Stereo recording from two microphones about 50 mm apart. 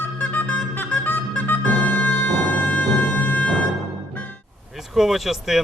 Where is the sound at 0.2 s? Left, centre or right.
Left.